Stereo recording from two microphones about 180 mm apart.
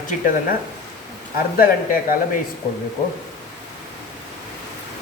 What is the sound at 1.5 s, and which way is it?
Speech, 50° left (ahead or behind).